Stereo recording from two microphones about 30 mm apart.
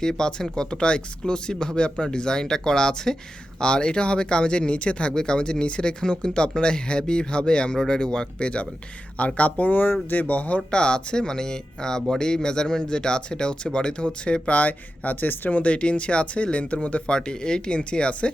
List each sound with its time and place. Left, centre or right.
0.0 s speech: left
9.1 s speech: left
10.1 s speech: left
10.3 s speech: left
10.7 s speech: left
14.5 s speech: left
15.6 s speech: left
17.1 s speech: left